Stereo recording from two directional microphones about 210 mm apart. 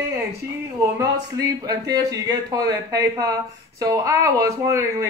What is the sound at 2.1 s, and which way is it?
Speech, 15° right (ahead or behind).